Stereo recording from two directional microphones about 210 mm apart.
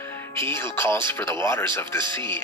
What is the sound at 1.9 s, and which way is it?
Speech, 20° right (ahead or behind).